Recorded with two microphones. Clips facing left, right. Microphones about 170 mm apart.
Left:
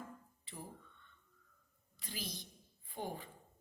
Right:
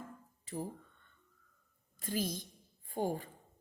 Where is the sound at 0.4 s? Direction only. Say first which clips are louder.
Right 11 dB; 45° right (ahead or behind).